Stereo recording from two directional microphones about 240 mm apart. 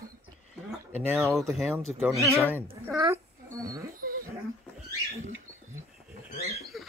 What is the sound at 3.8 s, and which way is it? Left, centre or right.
Wild animals, right.